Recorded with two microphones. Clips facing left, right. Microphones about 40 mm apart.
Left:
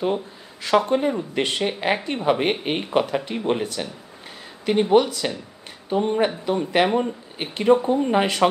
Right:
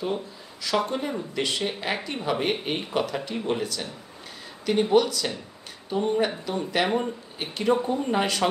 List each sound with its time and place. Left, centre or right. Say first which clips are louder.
0.0 s speech: left 5 dB; left